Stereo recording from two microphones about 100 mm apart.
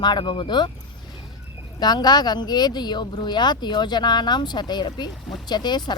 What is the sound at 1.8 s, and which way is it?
Speech, 45° left (ahead or behind).